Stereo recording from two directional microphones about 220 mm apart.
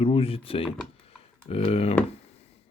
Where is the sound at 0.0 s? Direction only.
25° left (ahead or behind).